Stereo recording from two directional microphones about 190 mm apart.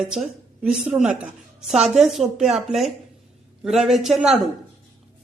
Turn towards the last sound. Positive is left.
turn(degrees=0)  # may be behind; listen again after turning